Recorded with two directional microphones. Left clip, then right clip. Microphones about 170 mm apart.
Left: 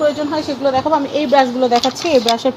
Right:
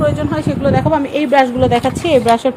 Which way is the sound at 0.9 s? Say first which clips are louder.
Even; 45° right (ahead or behind).